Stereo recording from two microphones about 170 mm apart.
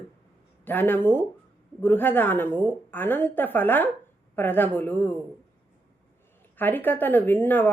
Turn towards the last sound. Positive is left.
turn(degrees=10)  # may be behind; listen again after turning